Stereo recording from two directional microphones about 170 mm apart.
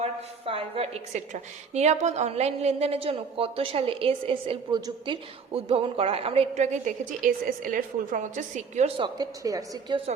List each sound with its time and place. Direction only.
0.0 s a woman's voice: 35° right (ahead or behind)
9.0 s a woman's voice: 25° right (ahead or behind)